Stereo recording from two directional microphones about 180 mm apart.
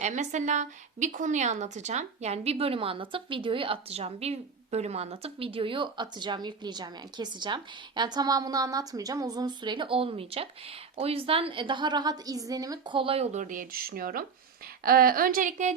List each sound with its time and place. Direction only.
0.0 s a woman's voice: 40° right (ahead or behind)